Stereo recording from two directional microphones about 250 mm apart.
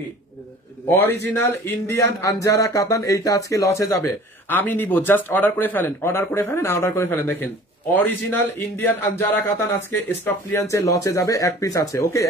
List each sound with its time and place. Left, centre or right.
1.0 s a man's voice: right
1.3 s a man's voice: centre